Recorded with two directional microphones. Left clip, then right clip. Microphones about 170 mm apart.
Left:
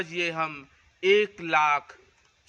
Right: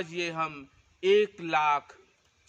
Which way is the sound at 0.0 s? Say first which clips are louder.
Left 3 dB; 15° left (ahead or behind).